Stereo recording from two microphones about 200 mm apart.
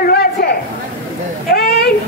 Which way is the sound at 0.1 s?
50° left (ahead or behind).